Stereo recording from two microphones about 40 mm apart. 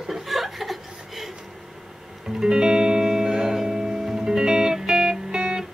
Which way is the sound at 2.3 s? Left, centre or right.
Centre.